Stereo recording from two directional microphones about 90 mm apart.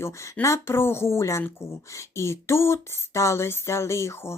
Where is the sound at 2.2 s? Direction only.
30° left (ahead or behind).